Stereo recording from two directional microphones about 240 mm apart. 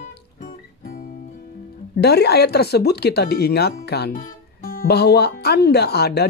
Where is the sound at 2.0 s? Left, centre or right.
Left.